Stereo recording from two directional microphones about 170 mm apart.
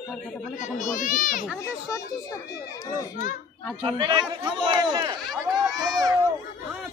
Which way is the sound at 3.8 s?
25° right (ahead or behind).